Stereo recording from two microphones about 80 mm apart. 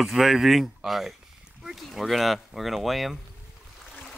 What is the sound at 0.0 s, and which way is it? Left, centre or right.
Speech, centre.